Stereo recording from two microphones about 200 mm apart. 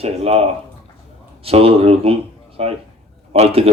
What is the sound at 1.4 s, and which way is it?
Speech, 30° right (ahead or behind).